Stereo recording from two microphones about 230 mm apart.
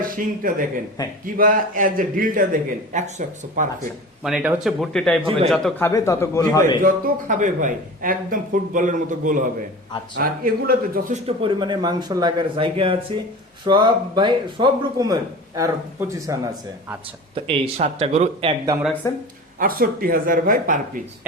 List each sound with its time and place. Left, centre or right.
0.0 s speech: right
4.2 s speech: centre
5.9 s a man's voice: centre
6.8 s speech: right
11.3 s a man's voice: right
17.5 s speech: right
19.1 s a man's voice: centre
19.5 s speech: right